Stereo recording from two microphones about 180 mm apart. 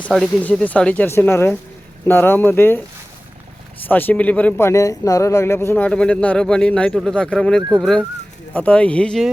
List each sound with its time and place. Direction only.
0.1 s speech: 5° left (ahead or behind)
3.8 s speech: 10° left (ahead or behind)